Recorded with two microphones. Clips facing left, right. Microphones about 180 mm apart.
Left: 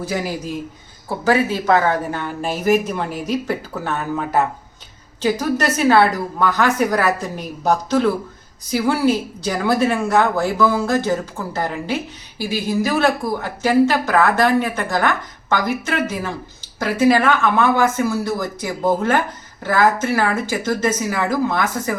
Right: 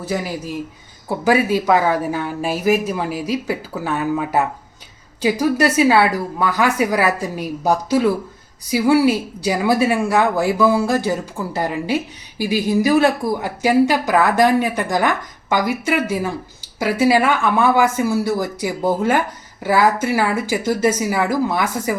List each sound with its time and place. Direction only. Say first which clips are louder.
0.0 s speech: even; 5° right (ahead or behind)
1.0 s a woman's voice: right 1 dB; 15° right (ahead or behind)